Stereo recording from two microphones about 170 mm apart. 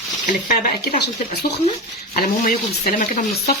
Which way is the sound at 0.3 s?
50° left (ahead or behind).